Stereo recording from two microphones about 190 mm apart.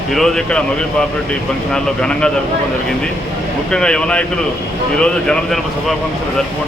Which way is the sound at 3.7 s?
5° left (ahead or behind).